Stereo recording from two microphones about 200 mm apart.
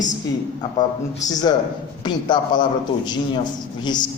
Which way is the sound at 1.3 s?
20° left (ahead or behind).